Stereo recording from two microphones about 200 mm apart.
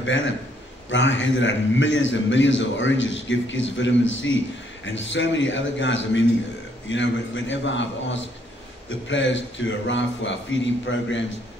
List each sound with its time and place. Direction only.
0.0 s a man's voice: 70° left (ahead or behind)